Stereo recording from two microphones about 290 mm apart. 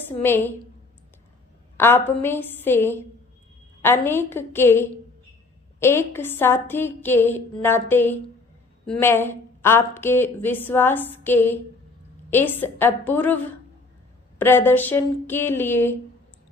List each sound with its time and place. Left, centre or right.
0.2 s a woman's voice: centre
1.8 s a woman's voice: centre